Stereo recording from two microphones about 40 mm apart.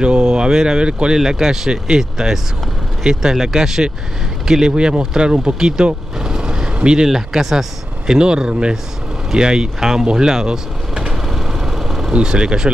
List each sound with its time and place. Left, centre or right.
0.0 s speech: right
1.2 s speech: centre
7.1 s speech: centre
8.1 s speech: right
11.2 s vehicle: centre
12.1 s speech: right